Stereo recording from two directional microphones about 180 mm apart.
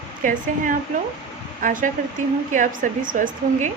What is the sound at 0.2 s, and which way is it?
A woman's voice, 50° right (ahead or behind).